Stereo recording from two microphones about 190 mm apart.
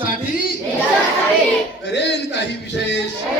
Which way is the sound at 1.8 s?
65° left (ahead or behind).